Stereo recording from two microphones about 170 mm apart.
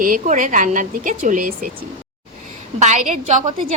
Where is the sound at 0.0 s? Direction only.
50° right (ahead or behind).